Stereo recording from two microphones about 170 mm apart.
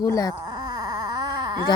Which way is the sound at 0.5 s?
25° right (ahead or behind).